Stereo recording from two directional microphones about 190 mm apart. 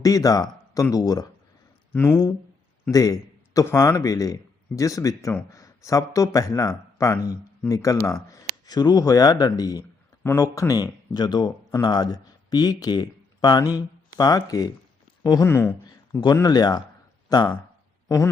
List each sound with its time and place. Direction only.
0.0 s a man's voice: 20° left (ahead or behind)